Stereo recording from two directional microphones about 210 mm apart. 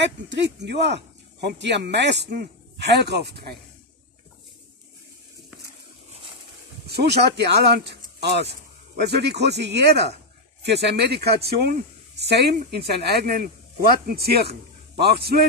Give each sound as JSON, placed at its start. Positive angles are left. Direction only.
{"t": 0.0, "sound": "speech", "side_deg": -55}
{"t": 6.9, "sound": "a man's voice", "side_deg": -50}